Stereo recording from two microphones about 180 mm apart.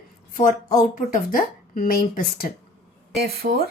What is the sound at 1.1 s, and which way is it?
Speech, 50° left (ahead or behind).